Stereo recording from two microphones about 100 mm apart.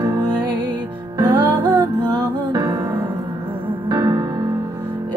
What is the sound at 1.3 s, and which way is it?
Music, 15° right (ahead or behind).